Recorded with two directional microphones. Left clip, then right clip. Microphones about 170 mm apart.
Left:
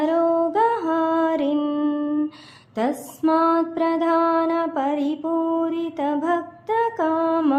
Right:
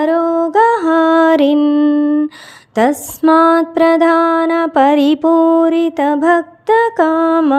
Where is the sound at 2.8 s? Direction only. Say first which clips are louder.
Right 10 dB; 45° right (ahead or behind).